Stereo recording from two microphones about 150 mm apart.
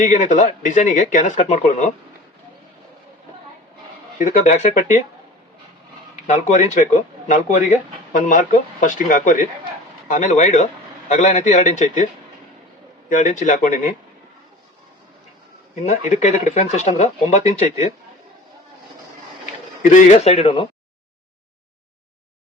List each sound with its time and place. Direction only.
0.0 s speech: 55° left (ahead or behind)
4.2 s speech: 55° left (ahead or behind)
6.1 s speech: 50° left (ahead or behind)
8.1 s speech: 55° left (ahead or behind)
13.1 s speech: 60° left (ahead or behind)
15.7 s speech: 50° left (ahead or behind)
19.9 s speech: 55° left (ahead or behind); by 20.7 s 35° left (ahead or behind)